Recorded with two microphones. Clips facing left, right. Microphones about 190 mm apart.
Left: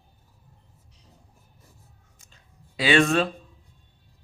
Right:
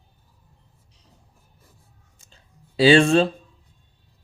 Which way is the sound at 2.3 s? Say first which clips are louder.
Right 2 dB; 30° right (ahead or behind).